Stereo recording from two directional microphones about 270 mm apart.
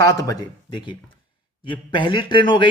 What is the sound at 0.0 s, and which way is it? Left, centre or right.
Speech, centre.